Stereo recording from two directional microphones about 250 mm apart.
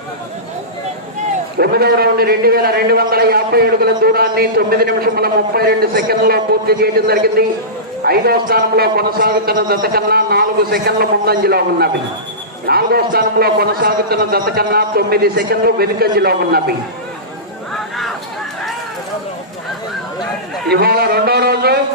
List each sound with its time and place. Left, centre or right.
1.5 s a man's voice: right
20.7 s speech: right